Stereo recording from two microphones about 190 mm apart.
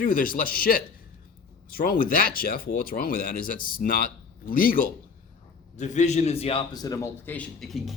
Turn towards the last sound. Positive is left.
turn(degrees=0)  # may be behind; listen again after turning